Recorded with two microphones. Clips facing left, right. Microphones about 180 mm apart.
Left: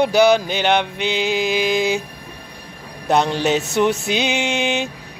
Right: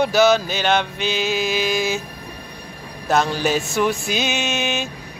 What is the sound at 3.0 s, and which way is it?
Speech, 20° left (ahead or behind).